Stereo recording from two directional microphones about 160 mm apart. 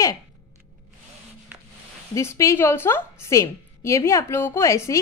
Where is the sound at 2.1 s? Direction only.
20° left (ahead or behind).